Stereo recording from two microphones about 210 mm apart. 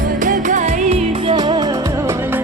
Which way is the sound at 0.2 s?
40° right (ahead or behind).